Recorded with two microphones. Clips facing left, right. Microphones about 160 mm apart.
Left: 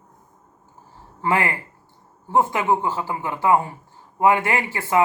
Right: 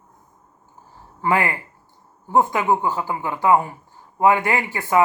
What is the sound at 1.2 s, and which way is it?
Speech, 25° left (ahead or behind).